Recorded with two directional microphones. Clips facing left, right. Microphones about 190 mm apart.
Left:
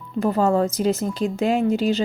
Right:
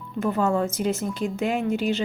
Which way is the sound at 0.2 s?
35° left (ahead or behind).